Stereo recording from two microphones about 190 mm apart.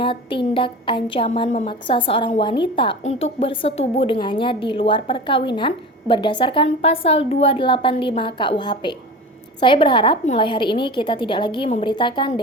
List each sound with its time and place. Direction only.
0.0 s a woman's voice: 25° left (ahead or behind)